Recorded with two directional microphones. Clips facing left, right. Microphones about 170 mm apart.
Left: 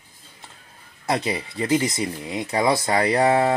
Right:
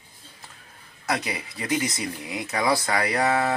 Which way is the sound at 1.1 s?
25° left (ahead or behind).